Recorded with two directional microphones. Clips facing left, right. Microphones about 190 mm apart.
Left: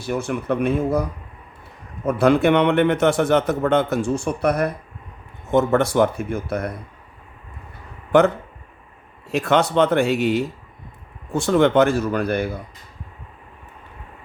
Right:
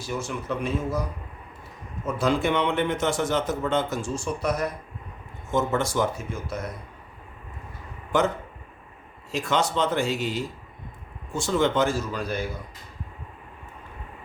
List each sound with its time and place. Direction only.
0.0 s speech: 60° left (ahead or behind)
2.0 s speech: 60° left (ahead or behind)
8.1 s speech: 60° left (ahead or behind)
9.3 s speech: 60° left (ahead or behind)